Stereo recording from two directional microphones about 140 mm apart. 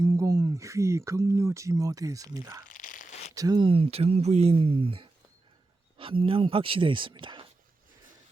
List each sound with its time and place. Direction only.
0.0 s speech: 25° right (ahead or behind)
2.6 s tearing: 70° left (ahead or behind)
3.3 s speech: 25° right (ahead or behind)
3.7 s speech: 45° right (ahead or behind)